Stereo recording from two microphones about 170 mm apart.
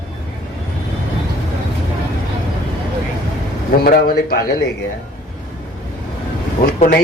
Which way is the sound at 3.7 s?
65° left (ahead or behind).